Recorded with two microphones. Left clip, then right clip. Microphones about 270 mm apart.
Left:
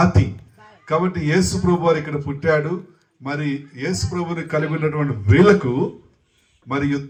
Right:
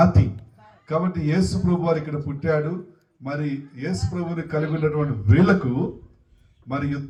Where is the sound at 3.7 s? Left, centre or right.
Centre.